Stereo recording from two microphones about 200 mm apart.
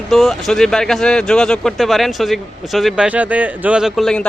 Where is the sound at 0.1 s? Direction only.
Centre (ahead or behind).